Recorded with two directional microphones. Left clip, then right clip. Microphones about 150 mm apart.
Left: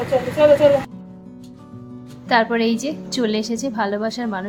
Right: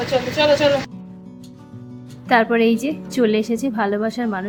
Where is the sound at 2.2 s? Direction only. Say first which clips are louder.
Right 2 dB; 15° right (ahead or behind).